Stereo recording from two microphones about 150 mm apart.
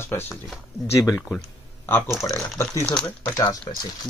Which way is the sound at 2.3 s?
20° left (ahead or behind).